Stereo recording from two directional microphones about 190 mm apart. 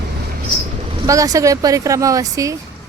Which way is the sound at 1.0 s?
15° right (ahead or behind).